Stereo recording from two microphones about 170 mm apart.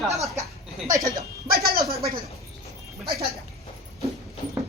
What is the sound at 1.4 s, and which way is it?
Music, 60° right (ahead or behind).